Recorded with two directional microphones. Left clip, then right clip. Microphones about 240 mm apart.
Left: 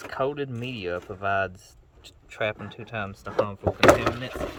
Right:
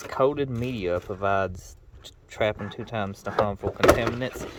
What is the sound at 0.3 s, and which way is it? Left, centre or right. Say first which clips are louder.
Speech: right 3 dB; centre.